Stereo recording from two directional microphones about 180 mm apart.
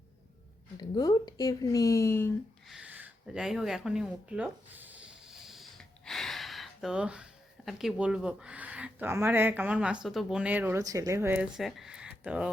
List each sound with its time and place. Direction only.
0.8 s speech: 20° left (ahead or behind)
2.6 s speech: 5° right (ahead or behind)